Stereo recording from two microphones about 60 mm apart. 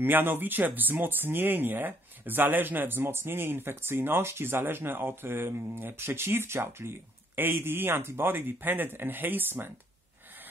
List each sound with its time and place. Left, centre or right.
0.0 s speech: right